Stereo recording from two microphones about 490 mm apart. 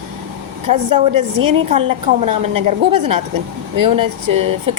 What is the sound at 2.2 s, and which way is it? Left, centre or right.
A woman's voice, right.